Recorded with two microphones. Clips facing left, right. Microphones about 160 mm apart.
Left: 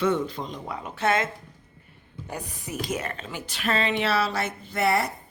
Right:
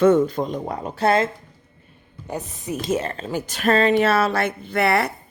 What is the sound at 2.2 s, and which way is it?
Speech, 20° right (ahead or behind).